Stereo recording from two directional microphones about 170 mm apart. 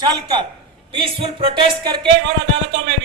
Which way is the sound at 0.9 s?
30° right (ahead or behind).